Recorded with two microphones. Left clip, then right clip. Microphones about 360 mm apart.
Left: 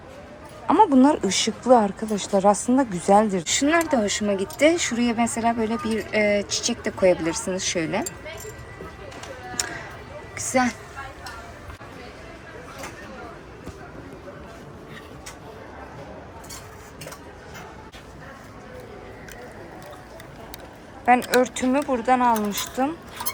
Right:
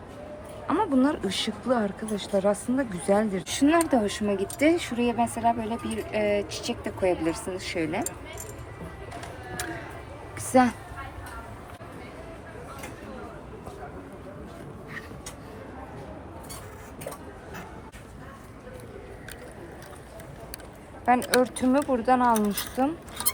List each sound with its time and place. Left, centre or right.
0.7 s speech: centre
10.3 s a sound: centre
21.1 s speech: centre